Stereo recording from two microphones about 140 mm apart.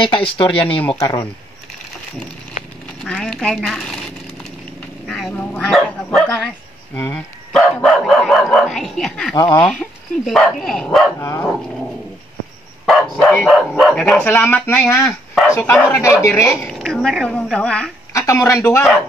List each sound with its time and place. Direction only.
0.0 s speech: 35° left (ahead or behind)
3.0 s speech: 5° left (ahead or behind)
5.0 s vehicle: centre (ahead or behind)
5.3 s speech: 15° left (ahead or behind)
9.3 s speech: 35° left (ahead or behind)
9.6 s speech: 5° left (ahead or behind)
11.1 s speech: 20° left (ahead or behind)
12.8 s speech: 5° left (ahead or behind)
14.3 s speech: 15° left (ahead or behind)
16.6 s speech: 5° left (ahead or behind)
18.1 s speech: 20° left (ahead or behind)